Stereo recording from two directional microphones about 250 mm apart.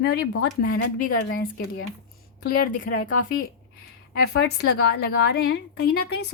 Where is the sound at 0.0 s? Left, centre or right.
Left.